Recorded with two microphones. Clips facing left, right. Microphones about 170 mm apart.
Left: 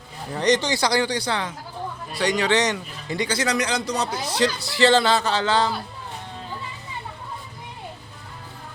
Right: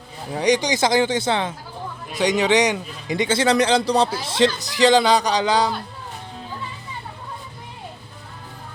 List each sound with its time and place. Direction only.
0.3 s speech: 10° right (ahead or behind)